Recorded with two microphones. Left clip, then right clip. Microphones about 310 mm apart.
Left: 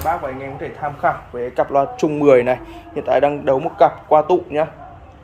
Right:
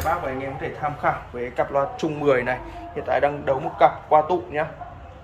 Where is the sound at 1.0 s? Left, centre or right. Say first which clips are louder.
Left 6 dB; left.